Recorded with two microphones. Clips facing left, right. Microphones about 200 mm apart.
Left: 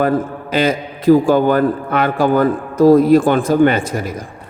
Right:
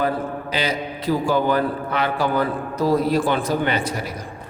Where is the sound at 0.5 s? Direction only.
50° left (ahead or behind).